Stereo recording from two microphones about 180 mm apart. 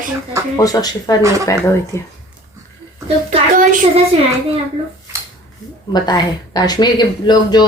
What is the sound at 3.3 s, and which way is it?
Speech, 45° right (ahead or behind).